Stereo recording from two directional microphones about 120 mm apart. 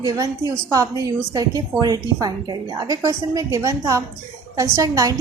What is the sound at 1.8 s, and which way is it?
A woman's voice, 35° right (ahead or behind).